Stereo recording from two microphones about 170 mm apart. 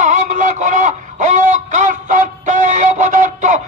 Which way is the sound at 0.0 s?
45° right (ahead or behind).